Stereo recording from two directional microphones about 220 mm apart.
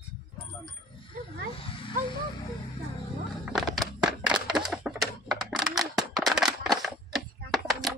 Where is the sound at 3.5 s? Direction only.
Centre (ahead or behind).